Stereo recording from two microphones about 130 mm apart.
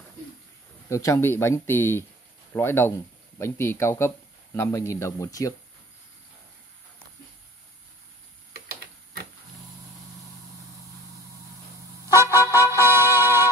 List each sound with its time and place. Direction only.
0.8 s speech: 25° left (ahead or behind)
12.1 s music: 20° right (ahead or behind)